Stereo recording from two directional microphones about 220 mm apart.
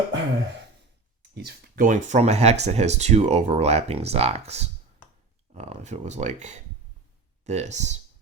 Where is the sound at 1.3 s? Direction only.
40° right (ahead or behind).